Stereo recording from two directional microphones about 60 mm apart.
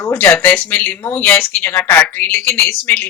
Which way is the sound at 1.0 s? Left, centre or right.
Left.